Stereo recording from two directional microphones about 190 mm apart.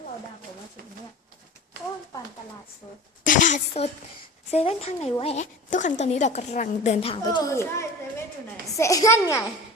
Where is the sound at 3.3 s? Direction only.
40° left (ahead or behind).